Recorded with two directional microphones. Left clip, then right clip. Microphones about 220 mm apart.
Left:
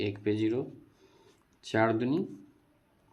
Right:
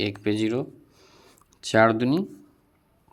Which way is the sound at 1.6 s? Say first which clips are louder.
Right 8 dB; 45° right (ahead or behind).